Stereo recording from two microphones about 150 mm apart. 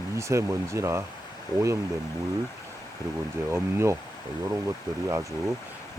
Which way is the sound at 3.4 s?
15° right (ahead or behind).